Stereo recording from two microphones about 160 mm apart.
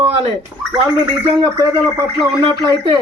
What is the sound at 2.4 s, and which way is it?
Speech, 30° right (ahead or behind).